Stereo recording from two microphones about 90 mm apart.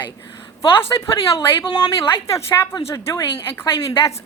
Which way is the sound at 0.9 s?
50° left (ahead or behind).